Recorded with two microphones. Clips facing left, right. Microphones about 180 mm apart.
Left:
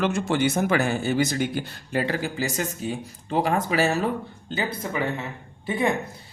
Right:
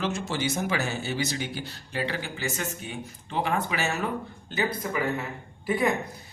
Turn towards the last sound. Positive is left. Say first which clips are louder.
# left 1 dB
turn(degrees=25)  # may be behind; listen again after turning